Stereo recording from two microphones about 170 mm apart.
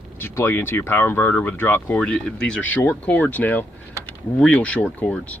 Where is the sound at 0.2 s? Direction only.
15° left (ahead or behind).